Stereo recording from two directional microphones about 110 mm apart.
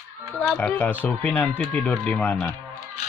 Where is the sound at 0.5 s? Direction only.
20° left (ahead or behind).